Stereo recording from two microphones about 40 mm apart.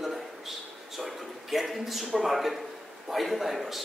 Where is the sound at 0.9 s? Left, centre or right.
Centre.